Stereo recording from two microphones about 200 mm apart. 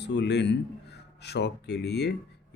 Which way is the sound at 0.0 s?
60° left (ahead or behind).